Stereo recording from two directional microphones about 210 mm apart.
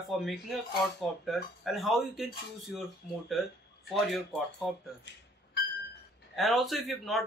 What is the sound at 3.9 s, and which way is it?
Speech, centre (ahead or behind).